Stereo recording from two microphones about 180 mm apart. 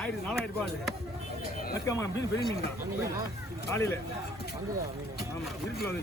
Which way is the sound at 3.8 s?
15° left (ahead or behind).